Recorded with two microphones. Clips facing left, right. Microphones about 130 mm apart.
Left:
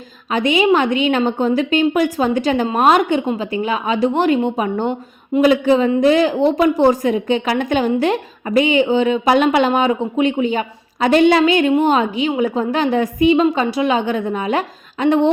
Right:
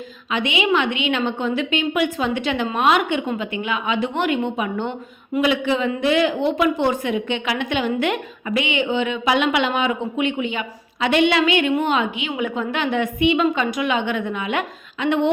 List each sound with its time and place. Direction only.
0.3 s a woman's voice: 40° left (ahead or behind)